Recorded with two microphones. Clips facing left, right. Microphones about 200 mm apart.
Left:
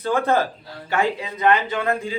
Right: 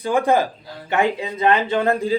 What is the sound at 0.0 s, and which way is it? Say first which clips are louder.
Speech: right 2 dB; 15° right (ahead or behind).